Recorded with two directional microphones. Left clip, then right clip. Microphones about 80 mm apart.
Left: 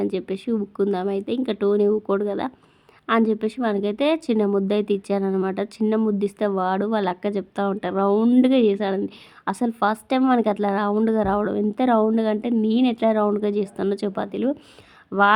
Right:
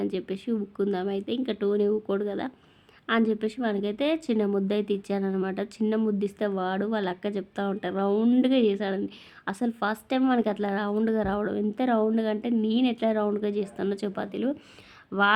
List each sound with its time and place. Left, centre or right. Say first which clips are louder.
0.0 s a woman's voice: left 5 dB; left